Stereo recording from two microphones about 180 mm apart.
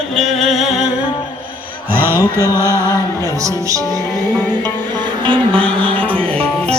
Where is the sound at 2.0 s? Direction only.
10° right (ahead or behind).